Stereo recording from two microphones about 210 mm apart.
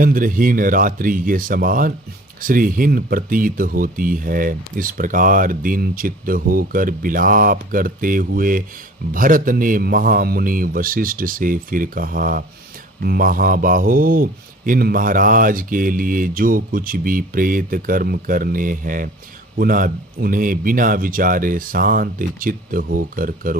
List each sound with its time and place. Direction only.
0.0 s speech: 40° right (ahead or behind)